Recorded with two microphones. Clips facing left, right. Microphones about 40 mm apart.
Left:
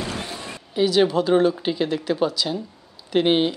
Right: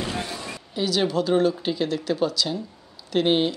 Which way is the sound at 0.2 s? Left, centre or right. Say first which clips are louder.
Even; left.